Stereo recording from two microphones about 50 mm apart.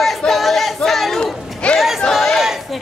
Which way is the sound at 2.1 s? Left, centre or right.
Centre.